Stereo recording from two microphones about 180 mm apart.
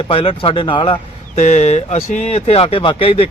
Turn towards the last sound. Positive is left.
turn(degrees=30)  # may be behind; listen again after turning